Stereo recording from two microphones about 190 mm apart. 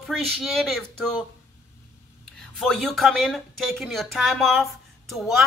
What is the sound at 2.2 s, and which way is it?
Speech, 5° left (ahead or behind).